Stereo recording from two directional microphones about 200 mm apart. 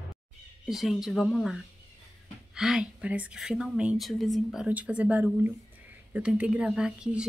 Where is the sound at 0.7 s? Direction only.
Centre (ahead or behind).